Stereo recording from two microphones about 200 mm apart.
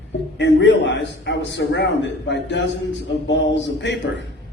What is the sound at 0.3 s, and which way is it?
A man's voice, 60° left (ahead or behind).